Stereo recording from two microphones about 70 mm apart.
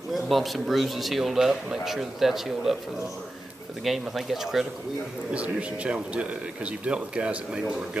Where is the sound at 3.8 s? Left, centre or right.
Centre.